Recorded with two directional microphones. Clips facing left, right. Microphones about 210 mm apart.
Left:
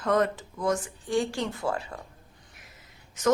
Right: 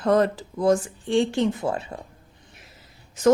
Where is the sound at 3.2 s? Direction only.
30° right (ahead or behind).